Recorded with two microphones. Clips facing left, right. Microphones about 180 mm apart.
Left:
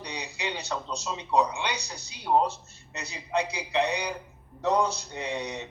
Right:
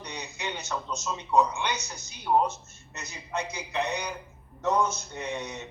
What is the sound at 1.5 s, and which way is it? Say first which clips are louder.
A man's voice: even; 35° left (ahead or behind).